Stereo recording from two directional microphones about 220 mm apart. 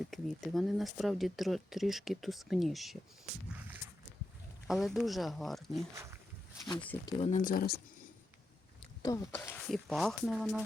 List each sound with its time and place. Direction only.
0.1 s speech: centre (ahead or behind)
4.7 s speech: centre (ahead or behind)
5.9 s speech: 10° right (ahead or behind)
7.0 s speech: 30° left (ahead or behind)
9.0 s speech: 15° left (ahead or behind); by 10.6 s centre (ahead or behind)